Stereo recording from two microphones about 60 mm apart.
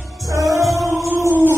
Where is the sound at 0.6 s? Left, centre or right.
Centre.